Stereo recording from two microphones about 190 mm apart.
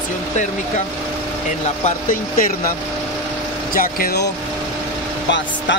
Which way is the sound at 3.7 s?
50° left (ahead or behind).